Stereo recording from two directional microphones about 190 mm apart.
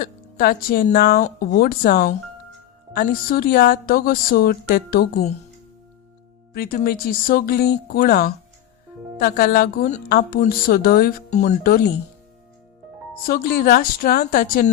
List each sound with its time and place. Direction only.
0.0 s a woman's voice: 50° left (ahead or behind)
6.5 s speech: 55° left (ahead or behind)
11.3 s speech: 40° left (ahead or behind)
11.6 s speech: 55° left (ahead or behind)
13.2 s speech: 50° left (ahead or behind)